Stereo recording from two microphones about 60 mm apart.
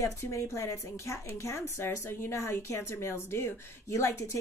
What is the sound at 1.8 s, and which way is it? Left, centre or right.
Speech, left.